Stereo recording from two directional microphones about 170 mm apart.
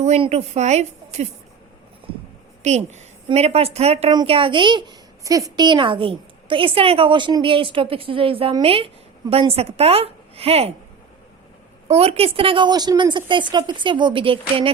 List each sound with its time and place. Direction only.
0.0 s a woman's voice: 40° right (ahead or behind)
2.6 s a woman's voice: 40° right (ahead or behind)
11.9 s a woman's voice: 35° right (ahead or behind)